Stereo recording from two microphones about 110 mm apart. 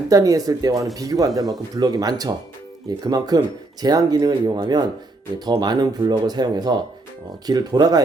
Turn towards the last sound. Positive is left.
turn(degrees=-35)  # may be behind; listen again after turning